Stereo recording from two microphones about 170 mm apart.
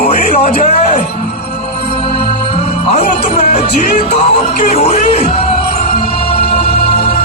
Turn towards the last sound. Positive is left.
turn(degrees=35)  # may be behind; listen again after turning